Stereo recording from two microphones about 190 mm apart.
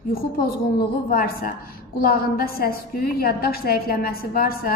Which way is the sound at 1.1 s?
50° left (ahead or behind).